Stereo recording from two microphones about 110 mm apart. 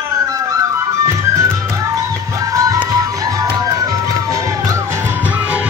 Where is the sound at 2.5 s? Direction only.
30° right (ahead or behind).